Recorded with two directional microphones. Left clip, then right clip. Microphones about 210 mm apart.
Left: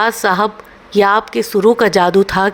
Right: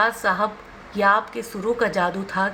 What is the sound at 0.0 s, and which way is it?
A woman's voice, 50° left (ahead or behind).